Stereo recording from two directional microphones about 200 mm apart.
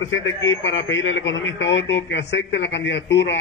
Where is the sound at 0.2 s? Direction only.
70° left (ahead or behind).